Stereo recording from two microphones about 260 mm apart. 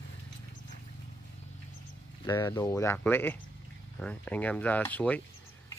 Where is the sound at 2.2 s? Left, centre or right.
Centre.